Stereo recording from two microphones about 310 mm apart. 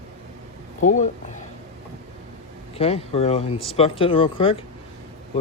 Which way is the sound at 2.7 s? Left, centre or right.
Centre.